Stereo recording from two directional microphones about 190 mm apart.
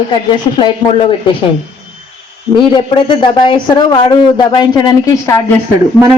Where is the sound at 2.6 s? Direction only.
25° left (ahead or behind).